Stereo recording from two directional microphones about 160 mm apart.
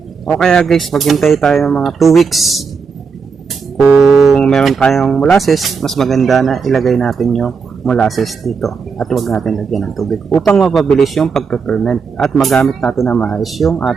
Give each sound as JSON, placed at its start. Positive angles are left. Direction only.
{"t": 0.3, "sound": "speech", "side_deg": 5}
{"t": 3.8, "sound": "music", "side_deg": 15}
{"t": 4.0, "sound": "speech", "side_deg": 0}